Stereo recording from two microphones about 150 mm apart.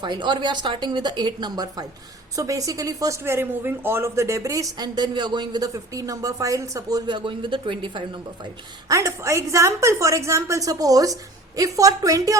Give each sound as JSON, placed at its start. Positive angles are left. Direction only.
{"t": 0.0, "sound": "speech", "side_deg": -30}
{"t": 8.9, "sound": "speech", "side_deg": -20}